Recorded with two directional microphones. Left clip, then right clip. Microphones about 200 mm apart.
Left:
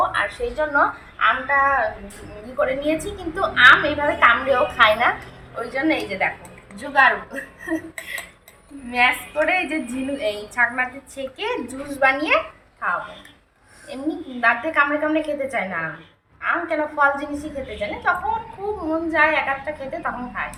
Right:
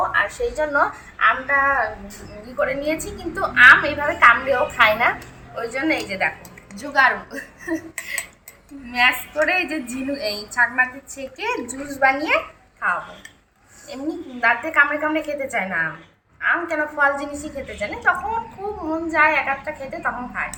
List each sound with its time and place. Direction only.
0.1 s a woman's voice: 5° right (ahead or behind)
14.4 s a woman's voice: 5° left (ahead or behind)